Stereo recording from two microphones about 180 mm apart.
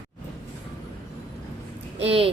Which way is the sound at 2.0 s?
30° right (ahead or behind).